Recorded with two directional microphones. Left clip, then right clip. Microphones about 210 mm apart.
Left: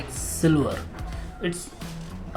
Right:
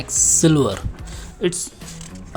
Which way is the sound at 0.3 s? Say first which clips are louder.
Right 4 dB; 45° right (ahead or behind).